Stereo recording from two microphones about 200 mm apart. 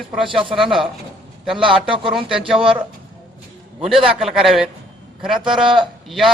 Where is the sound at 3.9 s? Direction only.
Centre (ahead or behind).